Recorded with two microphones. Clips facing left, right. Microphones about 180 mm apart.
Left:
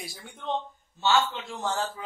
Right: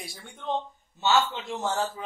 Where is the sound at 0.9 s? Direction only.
20° right (ahead or behind).